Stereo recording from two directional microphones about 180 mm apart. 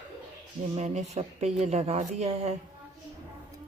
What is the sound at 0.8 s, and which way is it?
Speech, 40° right (ahead or behind).